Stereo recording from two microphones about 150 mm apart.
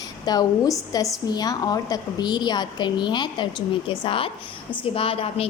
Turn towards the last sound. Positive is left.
turn(degrees=40)  # may be behind; listen again after turning